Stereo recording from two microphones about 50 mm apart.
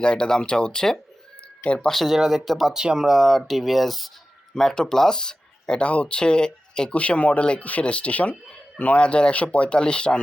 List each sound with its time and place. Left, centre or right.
0.0 s speech: centre
1.6 s speech: left
1.9 s speech: centre
2.7 s speech: centre
3.2 s speech: centre
4.5 s speech: centre
6.9 s speech: left